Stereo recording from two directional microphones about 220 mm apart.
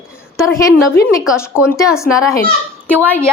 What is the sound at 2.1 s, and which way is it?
A woman's voice, centre (ahead or behind).